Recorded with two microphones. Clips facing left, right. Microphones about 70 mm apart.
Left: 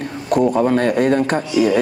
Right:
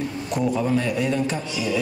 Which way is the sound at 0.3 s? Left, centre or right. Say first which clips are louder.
Left 8 dB; left.